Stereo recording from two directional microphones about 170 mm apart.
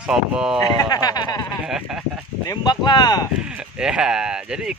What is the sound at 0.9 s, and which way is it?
Speech, 25° left (ahead or behind).